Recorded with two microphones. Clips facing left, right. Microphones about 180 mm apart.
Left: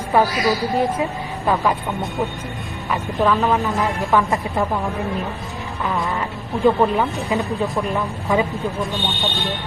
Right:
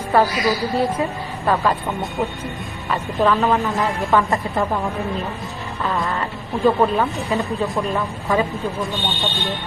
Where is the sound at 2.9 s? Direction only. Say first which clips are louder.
Even; centre (ahead or behind).